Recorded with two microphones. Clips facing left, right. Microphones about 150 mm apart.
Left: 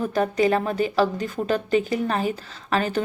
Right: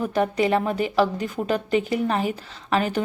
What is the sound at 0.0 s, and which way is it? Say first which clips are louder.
Speech: left 1 dB; 15° right (ahead or behind).